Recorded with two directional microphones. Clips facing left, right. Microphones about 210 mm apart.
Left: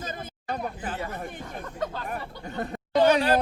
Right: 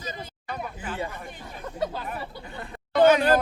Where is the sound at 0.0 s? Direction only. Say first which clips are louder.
Left 1 dB; 50° left (ahead or behind).